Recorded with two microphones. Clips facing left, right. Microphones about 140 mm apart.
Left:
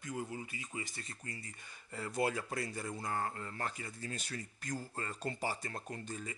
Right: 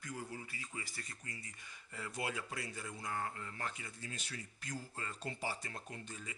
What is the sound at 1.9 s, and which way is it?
Speech, 40° left (ahead or behind).